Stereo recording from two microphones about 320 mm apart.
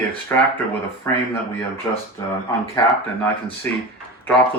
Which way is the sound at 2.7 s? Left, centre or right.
Centre.